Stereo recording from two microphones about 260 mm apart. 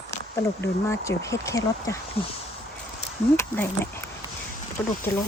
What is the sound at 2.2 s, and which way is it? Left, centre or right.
Speech, left.